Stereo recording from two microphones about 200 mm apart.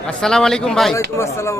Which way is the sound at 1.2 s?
15° left (ahead or behind).